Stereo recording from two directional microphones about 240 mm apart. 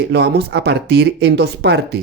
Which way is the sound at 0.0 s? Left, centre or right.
Right.